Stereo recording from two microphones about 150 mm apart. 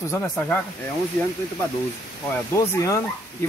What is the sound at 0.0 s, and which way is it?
Speech, 20° left (ahead or behind).